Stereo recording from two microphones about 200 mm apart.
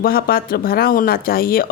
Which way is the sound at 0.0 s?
50° left (ahead or behind).